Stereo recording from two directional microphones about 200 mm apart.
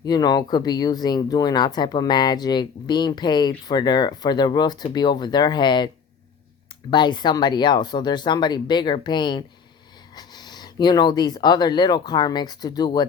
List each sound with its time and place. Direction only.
0.0 s speech: 20° left (ahead or behind)
6.9 s speech: 20° left (ahead or behind)